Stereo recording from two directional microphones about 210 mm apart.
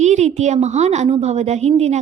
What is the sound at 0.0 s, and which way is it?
A woman's voice, 35° right (ahead or behind).